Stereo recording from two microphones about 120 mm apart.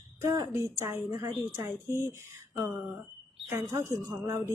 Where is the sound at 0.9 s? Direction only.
25° right (ahead or behind).